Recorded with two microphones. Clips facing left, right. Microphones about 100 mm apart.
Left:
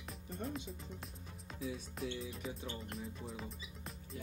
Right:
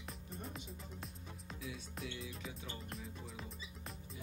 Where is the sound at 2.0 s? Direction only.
35° left (ahead or behind).